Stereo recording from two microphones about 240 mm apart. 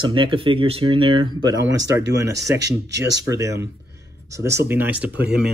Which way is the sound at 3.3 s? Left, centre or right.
Centre.